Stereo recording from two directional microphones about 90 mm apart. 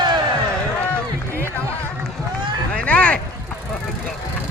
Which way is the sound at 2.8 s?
15° left (ahead or behind).